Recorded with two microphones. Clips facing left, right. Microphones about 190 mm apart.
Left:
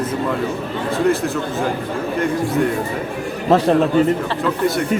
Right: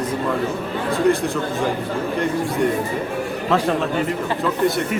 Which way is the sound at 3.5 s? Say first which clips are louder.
Left 5 dB; 35° left (ahead or behind).